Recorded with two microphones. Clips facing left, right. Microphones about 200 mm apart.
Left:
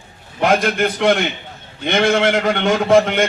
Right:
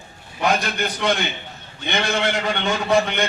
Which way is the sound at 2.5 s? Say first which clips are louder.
Left 7 dB; 50° left (ahead or behind).